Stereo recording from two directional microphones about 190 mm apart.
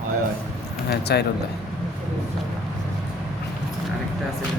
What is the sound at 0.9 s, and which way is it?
Speech, 60° left (ahead or behind).